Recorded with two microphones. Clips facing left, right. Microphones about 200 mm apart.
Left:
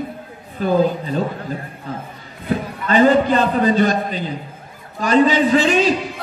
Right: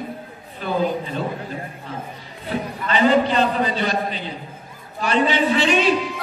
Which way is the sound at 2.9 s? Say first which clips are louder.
Left 4 dB; 45° left (ahead or behind).